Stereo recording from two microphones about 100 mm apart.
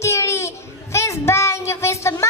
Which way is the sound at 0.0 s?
30° left (ahead or behind).